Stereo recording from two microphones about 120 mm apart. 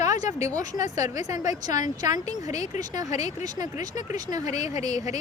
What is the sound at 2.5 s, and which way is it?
Speech, 75° left (ahead or behind).